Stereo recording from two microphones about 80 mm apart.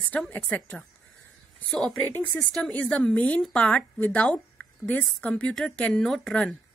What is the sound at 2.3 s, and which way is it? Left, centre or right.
Speech, centre.